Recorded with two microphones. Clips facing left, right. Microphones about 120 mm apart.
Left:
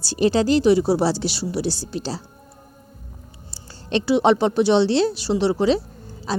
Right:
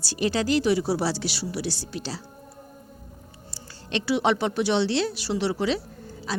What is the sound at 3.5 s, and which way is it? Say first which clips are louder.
A woman's voice: left 7 dB; 30° left (ahead or behind).